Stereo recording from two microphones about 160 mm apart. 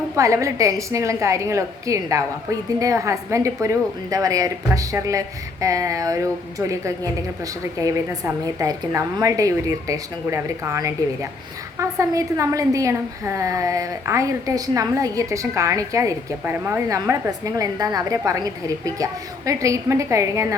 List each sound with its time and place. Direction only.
0.2 s a woman's voice: 20° right (ahead or behind)
19.5 s a woman's voice: 20° right (ahead or behind)